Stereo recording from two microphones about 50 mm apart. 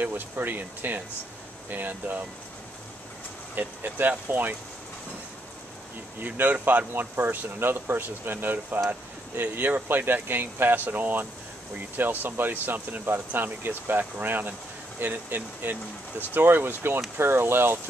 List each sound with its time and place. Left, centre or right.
0.0 s speech: right
3.5 s speech: right
6.2 s speech: right
6.9 s speech: right
9.4 s speech: right